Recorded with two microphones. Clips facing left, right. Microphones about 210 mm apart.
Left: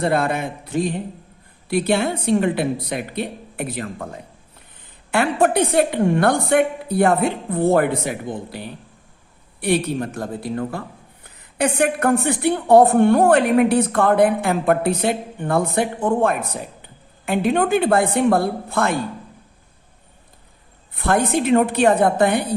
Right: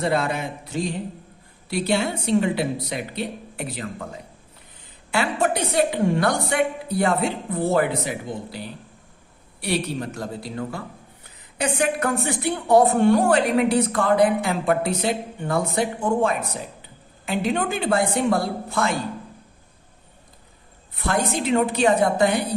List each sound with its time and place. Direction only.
0.0 s a woman's voice: 55° left (ahead or behind)
20.9 s a woman's voice: 55° left (ahead or behind)